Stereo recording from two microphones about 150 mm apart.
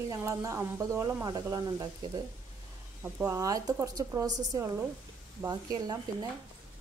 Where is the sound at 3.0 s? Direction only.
15° right (ahead or behind).